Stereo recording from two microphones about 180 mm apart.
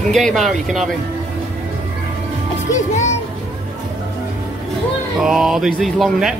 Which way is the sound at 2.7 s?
40° left (ahead or behind).